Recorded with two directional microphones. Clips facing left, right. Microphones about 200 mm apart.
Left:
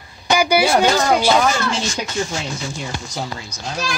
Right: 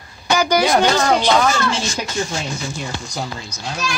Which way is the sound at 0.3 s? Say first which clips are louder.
Even; 10° left (ahead or behind).